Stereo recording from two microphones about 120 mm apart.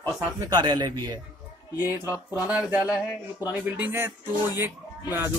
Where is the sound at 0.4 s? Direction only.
35° right (ahead or behind).